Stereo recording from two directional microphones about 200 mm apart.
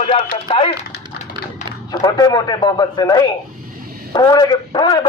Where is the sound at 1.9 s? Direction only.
20° left (ahead or behind).